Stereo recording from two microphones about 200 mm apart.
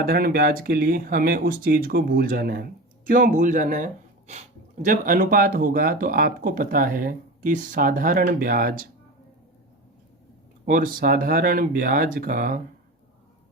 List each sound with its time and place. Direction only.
0.0 s speech: 50° right (ahead or behind)
10.7 s speech: 45° right (ahead or behind)